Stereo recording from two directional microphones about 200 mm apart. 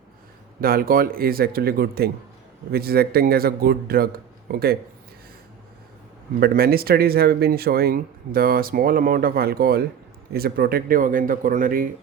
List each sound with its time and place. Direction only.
0.6 s speech: 45° right (ahead or behind)
6.4 s speech: 50° right (ahead or behind)